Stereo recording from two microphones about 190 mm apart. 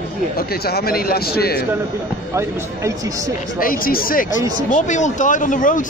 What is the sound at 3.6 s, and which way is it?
A man's voice, 50° left (ahead or behind).